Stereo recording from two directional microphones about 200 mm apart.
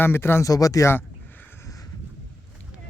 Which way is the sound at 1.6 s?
15° left (ahead or behind).